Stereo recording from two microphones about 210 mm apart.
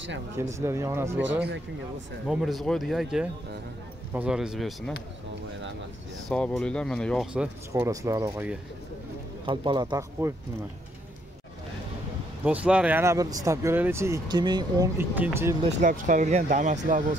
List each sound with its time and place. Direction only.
0.6 s speech: 15° right (ahead or behind)
2.2 s speech: centre (ahead or behind)
6.2 s speech: 5° left (ahead or behind)
7.7 s speech: 15° right (ahead or behind)
9.5 s speech: 20° right (ahead or behind)
12.4 s speech: 5° right (ahead or behind)
15.8 s speech: 40° right (ahead or behind)